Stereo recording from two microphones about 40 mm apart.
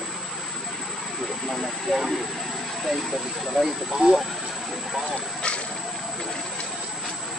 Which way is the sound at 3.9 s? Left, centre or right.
Centre.